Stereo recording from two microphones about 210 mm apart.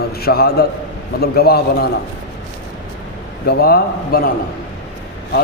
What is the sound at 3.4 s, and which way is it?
Speech, 45° left (ahead or behind).